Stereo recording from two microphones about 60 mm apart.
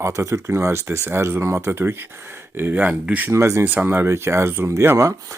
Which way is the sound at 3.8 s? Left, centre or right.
Right.